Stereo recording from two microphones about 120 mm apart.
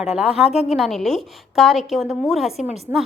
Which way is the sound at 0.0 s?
5° right (ahead or behind).